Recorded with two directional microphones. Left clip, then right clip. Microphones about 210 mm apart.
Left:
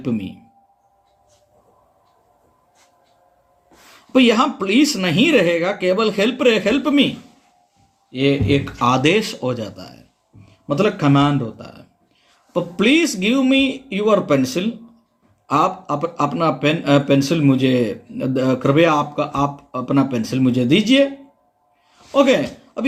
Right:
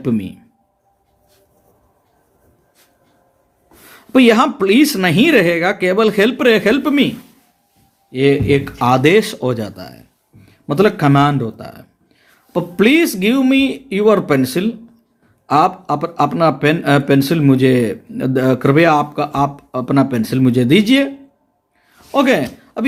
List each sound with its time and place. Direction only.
0.0 s speech: 45° right (ahead or behind)
4.1 s speech: 45° right (ahead or behind)
8.1 s speech: 45° right (ahead or behind)
22.1 s speech: 45° right (ahead or behind)